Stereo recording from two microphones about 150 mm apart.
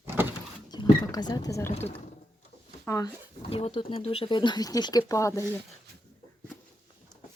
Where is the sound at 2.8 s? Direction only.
20° left (ahead or behind).